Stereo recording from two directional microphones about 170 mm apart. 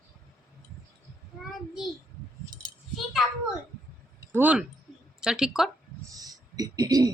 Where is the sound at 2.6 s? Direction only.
Centre (ahead or behind).